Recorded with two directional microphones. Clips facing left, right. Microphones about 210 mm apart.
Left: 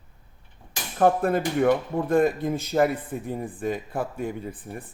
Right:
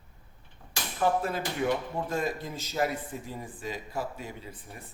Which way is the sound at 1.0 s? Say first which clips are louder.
Left 7 dB; 55° left (ahead or behind).